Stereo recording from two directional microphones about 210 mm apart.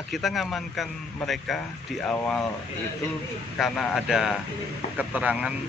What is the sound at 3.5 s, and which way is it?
Speech, centre (ahead or behind).